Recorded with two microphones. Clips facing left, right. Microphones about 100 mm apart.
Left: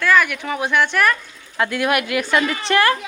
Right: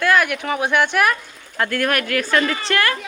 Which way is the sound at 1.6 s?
10° left (ahead or behind).